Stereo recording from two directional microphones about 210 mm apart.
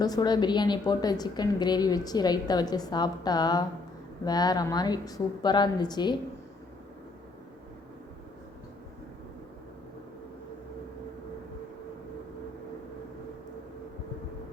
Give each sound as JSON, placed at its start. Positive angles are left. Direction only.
{"t": 0.0, "sound": "a woman's voice", "side_deg": 20}